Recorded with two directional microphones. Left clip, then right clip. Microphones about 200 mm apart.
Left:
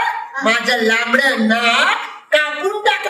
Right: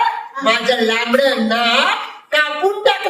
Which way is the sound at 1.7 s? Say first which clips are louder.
Left 1 dB; 35° left (ahead or behind).